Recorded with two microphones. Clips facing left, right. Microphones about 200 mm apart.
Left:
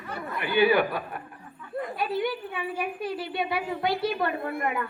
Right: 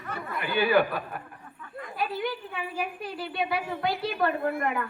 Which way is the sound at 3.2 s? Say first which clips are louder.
Right 4 dB; 25° left (ahead or behind).